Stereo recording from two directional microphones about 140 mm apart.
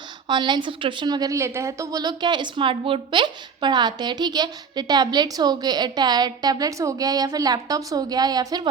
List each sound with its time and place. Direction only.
0.3 s a woman's voice: 35° right (ahead or behind)